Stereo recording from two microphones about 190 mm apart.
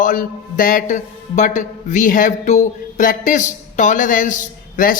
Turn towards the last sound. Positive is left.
turn(degrees=45)  # may be behind; listen again after turning